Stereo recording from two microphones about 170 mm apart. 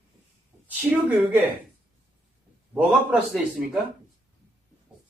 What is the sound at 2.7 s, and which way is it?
Speech, 5° right (ahead or behind).